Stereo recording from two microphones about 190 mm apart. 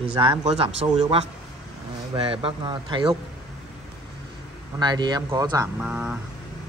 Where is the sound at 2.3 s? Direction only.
30° right (ahead or behind).